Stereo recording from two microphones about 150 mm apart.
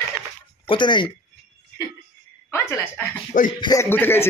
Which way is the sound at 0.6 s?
30° left (ahead or behind).